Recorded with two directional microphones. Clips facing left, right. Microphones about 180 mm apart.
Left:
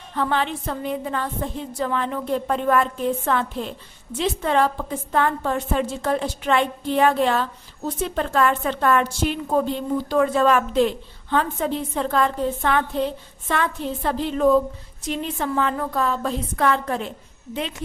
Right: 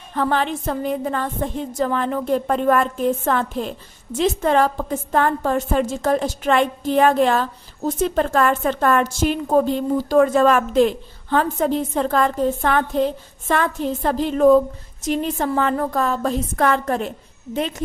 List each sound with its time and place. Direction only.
0.1 s a woman's voice: 45° right (ahead or behind)